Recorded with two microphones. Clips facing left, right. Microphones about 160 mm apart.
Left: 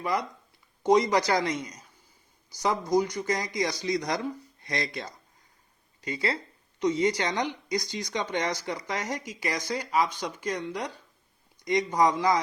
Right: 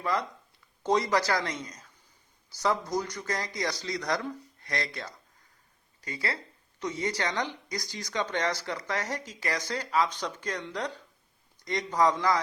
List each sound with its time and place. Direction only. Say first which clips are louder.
0.0 s a woman's voice: left 1 dB; 15° left (ahead or behind)